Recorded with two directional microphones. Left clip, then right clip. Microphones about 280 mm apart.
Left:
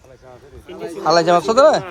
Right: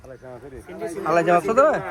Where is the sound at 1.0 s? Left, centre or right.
Centre.